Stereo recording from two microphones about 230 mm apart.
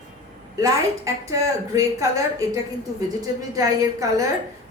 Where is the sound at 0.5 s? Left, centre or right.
Centre.